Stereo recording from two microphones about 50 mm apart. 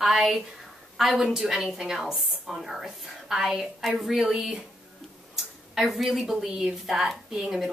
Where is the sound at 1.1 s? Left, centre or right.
Centre.